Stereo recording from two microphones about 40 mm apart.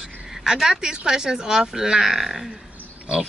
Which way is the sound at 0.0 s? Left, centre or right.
Centre.